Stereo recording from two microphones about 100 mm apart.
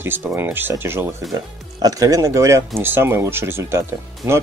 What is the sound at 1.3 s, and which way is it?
Speech, 40° right (ahead or behind).